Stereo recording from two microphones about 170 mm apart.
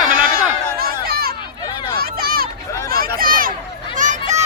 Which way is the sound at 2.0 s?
60° right (ahead or behind).